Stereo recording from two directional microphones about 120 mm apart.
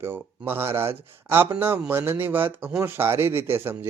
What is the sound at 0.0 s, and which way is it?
Speech, 20° right (ahead or behind).